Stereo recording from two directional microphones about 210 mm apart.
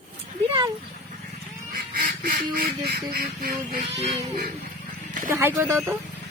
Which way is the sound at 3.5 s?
30° right (ahead or behind).